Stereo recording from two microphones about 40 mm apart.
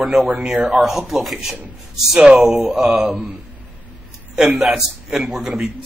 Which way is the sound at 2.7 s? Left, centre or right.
Centre.